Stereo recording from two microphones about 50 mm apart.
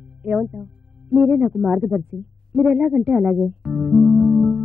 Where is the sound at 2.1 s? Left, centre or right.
Centre.